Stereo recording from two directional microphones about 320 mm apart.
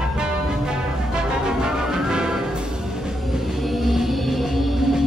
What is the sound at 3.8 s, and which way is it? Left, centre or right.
Music, centre.